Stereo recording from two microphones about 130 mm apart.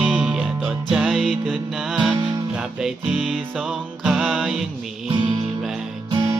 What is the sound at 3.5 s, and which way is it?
Music, centre (ahead or behind).